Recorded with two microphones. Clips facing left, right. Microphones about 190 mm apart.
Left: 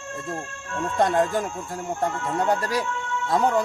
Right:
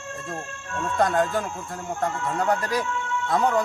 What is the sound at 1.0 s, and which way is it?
Speech, 30° left (ahead or behind).